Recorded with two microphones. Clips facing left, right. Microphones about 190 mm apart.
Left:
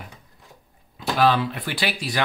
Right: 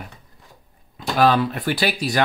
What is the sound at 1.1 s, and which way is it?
Speech, 45° right (ahead or behind).